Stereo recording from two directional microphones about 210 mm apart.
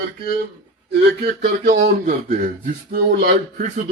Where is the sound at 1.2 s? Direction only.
45° right (ahead or behind).